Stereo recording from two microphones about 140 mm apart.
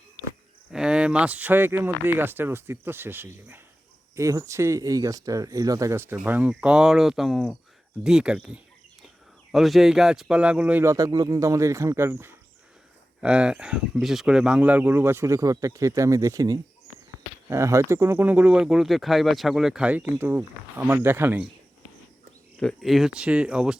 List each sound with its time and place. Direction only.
0.7 s speech: 5° right (ahead or behind)
10.8 s speech: 25° right (ahead or behind)
22.6 s speech: centre (ahead or behind)